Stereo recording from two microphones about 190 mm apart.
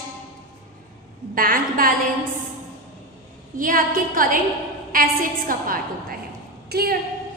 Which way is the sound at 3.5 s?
45° right (ahead or behind).